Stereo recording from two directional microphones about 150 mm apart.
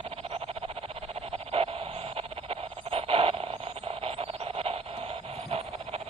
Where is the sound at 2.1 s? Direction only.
40° right (ahead or behind).